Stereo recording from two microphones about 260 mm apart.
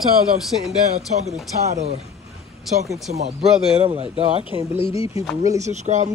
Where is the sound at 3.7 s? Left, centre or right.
Right.